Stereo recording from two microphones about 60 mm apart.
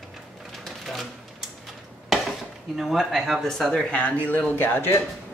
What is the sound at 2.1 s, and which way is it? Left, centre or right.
Speech, centre.